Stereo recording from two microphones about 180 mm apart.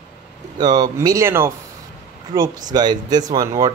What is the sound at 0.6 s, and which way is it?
A man's voice, 25° right (ahead or behind).